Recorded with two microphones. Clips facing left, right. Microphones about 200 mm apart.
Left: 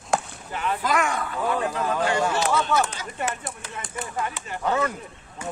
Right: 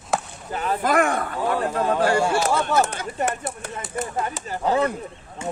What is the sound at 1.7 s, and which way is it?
Speech, 30° right (ahead or behind).